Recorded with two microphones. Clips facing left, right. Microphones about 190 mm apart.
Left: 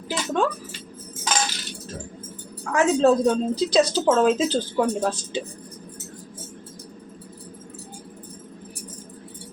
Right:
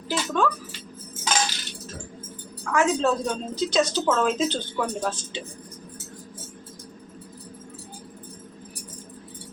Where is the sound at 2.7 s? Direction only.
30° left (ahead or behind).